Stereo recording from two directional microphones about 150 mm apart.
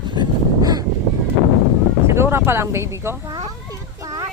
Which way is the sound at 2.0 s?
15° right (ahead or behind).